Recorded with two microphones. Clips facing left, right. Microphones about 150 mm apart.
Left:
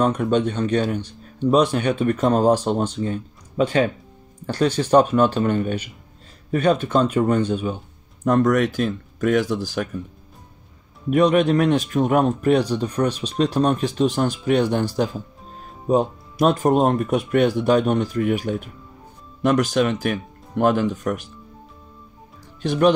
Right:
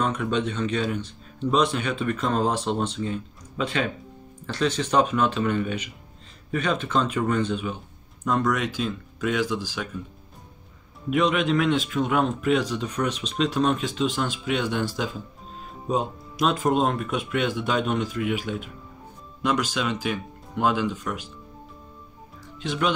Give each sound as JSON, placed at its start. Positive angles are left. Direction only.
{"t": 0.0, "sound": "a man's voice", "side_deg": 35}
{"t": 8.3, "sound": "speech", "side_deg": 55}
{"t": 11.1, "sound": "a man's voice", "side_deg": 45}
{"t": 16.4, "sound": "speech", "side_deg": 45}